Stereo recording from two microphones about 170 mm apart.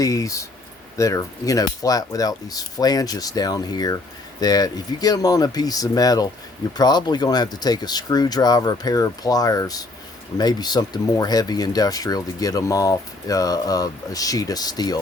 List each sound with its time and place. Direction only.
0.0 s speech: 20° left (ahead or behind)